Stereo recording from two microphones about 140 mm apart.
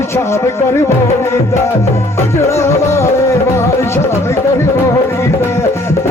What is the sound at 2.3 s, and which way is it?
Music, 20° left (ahead or behind).